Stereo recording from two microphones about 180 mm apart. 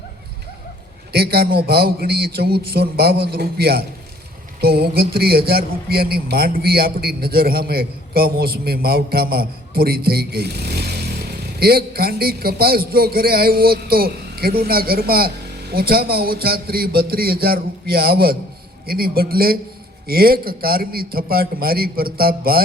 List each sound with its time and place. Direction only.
1.1 s a man's voice: 60° right (ahead or behind)